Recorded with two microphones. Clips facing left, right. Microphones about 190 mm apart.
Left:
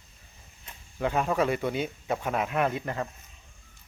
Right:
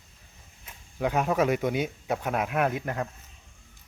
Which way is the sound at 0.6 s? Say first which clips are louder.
Right 1 dB; 5° right (ahead or behind).